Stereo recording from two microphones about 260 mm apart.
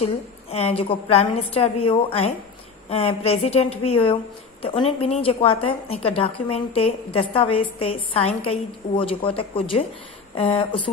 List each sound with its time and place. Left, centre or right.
0.0 s a woman's voice: left